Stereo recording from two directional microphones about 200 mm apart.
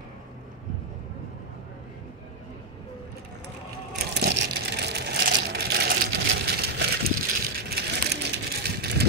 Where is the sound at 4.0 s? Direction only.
55° right (ahead or behind).